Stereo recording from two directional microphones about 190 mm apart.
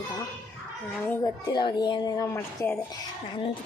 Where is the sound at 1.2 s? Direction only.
20° left (ahead or behind).